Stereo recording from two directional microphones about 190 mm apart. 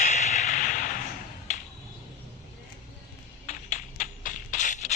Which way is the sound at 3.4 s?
40° left (ahead or behind).